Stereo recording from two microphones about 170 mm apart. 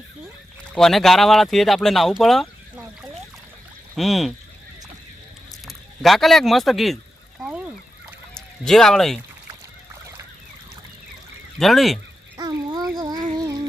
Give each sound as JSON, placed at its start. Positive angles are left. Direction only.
{"t": 0.7, "sound": "speech", "side_deg": 0}
{"t": 3.9, "sound": "speech", "side_deg": 0}
{"t": 5.5, "sound": "speech", "side_deg": 0}
{"t": 7.4, "sound": "fowl", "side_deg": -5}
{"t": 8.4, "sound": "speech", "side_deg": 5}
{"t": 11.5, "sound": "speech", "side_deg": 0}
{"t": 12.4, "sound": "a sound", "side_deg": -20}
{"t": 13.0, "sound": "music", "side_deg": -25}
{"t": 13.3, "sound": "a sound", "side_deg": -20}